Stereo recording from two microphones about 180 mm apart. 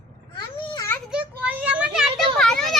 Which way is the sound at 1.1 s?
5° right (ahead or behind).